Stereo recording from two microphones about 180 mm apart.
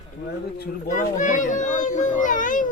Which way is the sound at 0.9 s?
45° left (ahead or behind).